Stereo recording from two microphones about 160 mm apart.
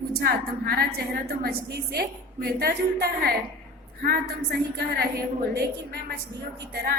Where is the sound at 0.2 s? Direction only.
90° right.